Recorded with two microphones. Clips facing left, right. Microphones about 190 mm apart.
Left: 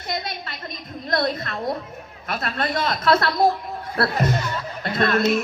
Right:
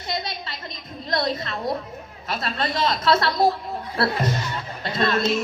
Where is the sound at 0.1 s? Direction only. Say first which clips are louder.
Even; 50° left (ahead or behind).